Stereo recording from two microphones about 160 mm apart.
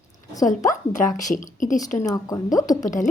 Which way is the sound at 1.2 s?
55° left (ahead or behind).